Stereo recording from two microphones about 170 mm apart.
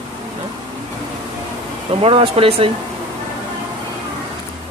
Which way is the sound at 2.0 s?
35° right (ahead or behind).